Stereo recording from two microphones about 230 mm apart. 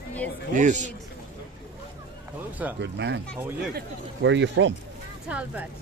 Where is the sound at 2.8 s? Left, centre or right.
Right.